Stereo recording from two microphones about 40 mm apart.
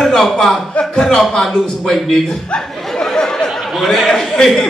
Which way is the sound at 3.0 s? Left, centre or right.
Centre.